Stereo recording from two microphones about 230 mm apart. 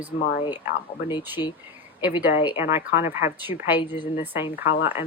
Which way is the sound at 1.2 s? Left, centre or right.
Centre.